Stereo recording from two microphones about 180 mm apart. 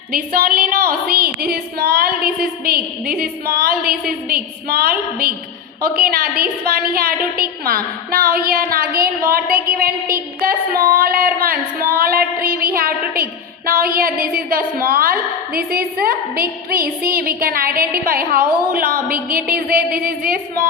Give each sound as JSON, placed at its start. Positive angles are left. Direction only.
{"t": 0.1, "sound": "a woman's voice", "side_deg": -55}